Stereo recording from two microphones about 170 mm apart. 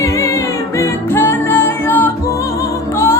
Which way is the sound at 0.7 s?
15° left (ahead or behind).